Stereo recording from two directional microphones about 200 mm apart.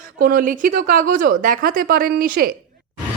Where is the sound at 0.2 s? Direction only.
45° right (ahead or behind).